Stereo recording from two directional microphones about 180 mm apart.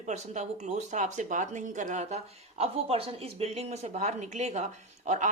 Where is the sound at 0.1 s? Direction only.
40° right (ahead or behind).